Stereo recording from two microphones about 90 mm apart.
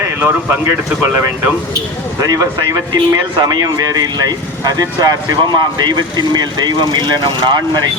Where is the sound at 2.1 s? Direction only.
40° right (ahead or behind).